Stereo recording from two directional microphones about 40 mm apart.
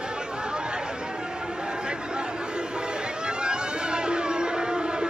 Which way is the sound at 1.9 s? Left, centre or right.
Right.